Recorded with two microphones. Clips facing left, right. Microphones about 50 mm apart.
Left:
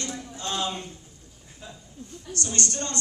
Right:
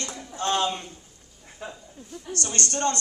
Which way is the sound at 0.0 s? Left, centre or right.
Right.